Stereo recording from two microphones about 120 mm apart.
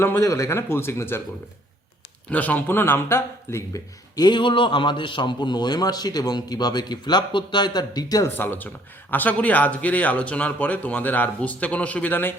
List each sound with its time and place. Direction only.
0.0 s speech: 20° left (ahead or behind)
2.3 s speech: 15° left (ahead or behind); by 8.3 s 30° left (ahead or behind)
8.4 s a man's voice: 15° left (ahead or behind)